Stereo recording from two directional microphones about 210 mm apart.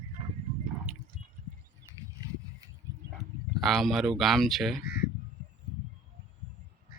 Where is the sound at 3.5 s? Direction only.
Centre (ahead or behind).